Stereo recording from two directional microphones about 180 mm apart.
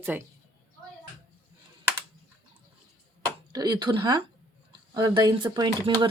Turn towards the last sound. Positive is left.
turn(degrees=-25)  # may be behind; listen again after turning